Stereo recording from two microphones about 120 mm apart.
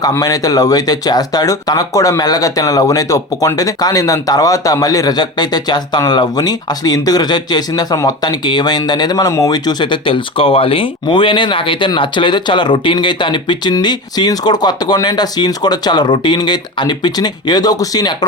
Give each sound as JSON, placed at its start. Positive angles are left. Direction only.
{"t": 0.2, "sound": "speech", "side_deg": 30}